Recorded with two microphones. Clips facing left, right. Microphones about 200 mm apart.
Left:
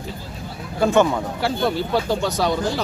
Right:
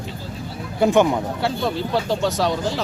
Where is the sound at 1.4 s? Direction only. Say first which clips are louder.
Left 1 dB; centre (ahead or behind).